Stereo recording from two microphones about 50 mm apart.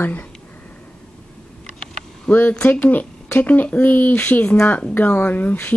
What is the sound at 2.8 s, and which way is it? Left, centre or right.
Speech, left.